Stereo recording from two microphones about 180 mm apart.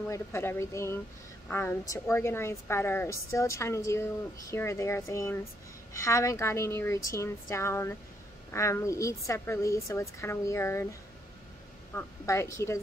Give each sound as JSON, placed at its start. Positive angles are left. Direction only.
{"t": 0.1, "sound": "a woman's voice", "side_deg": 15}